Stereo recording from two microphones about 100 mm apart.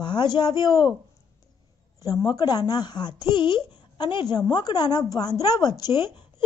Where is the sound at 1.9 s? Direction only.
35° left (ahead or behind).